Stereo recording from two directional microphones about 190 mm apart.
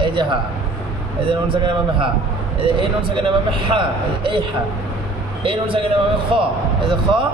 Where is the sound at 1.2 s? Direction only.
25° right (ahead or behind).